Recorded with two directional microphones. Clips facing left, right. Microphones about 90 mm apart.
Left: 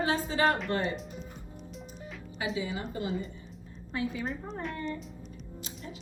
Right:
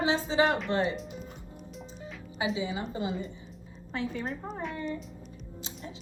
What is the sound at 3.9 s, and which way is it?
Speech, 5° left (ahead or behind).